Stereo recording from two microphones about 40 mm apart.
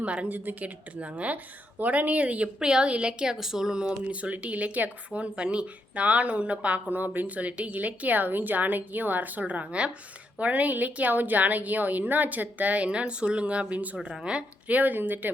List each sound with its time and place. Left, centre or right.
0.0 s a woman's voice: right
0.3 s a woman's voice: right
0.6 s speech: right
2.6 s a woman's voice: right
3.3 s a woman's voice: centre
4.0 s a woman's voice: right
14.7 s a woman's voice: right